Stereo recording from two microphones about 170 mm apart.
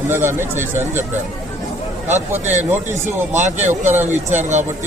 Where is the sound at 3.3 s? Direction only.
45° right (ahead or behind).